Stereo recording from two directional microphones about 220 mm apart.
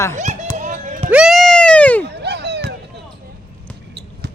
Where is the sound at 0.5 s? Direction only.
35° right (ahead or behind).